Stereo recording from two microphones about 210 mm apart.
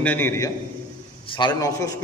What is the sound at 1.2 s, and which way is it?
Speech, 20° left (ahead or behind).